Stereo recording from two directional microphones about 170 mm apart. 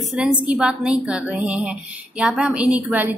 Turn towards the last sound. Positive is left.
turn(degrees=-10)  # may be behind; listen again after turning